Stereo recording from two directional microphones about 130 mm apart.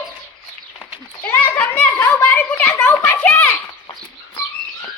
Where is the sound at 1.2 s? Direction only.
15° left (ahead or behind).